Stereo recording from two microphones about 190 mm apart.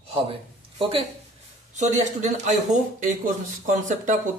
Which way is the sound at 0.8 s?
30° right (ahead or behind).